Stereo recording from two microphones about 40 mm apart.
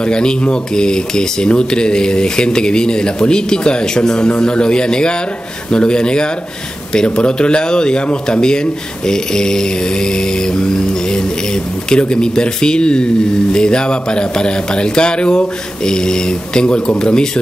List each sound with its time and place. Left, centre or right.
0.0 s speech: left